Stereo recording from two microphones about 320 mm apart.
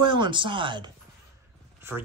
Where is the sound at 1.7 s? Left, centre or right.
Centre.